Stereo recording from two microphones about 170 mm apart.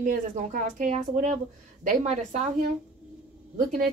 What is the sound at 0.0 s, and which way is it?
A woman's voice, 50° right (ahead or behind).